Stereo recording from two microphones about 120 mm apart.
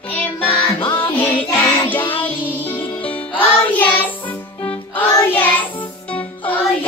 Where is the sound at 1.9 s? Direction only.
45° left (ahead or behind).